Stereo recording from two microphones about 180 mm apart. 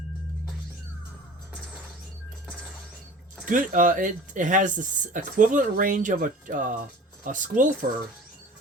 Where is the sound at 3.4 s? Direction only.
45° right (ahead or behind).